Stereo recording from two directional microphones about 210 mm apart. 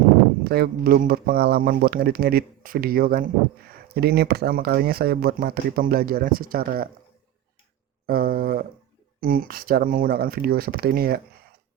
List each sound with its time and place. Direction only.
0.4 s speech: 45° right (ahead or behind)
8.0 s speech: 45° right (ahead or behind)